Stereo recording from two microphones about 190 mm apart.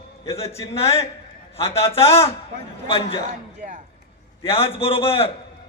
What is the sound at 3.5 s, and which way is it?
Speech, 40° right (ahead or behind).